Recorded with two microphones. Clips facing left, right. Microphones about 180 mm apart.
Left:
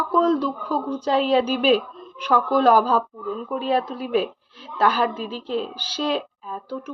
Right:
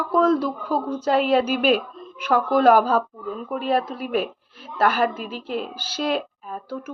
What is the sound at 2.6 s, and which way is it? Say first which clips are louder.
Speech: right 2 dB; 50° right (ahead or behind).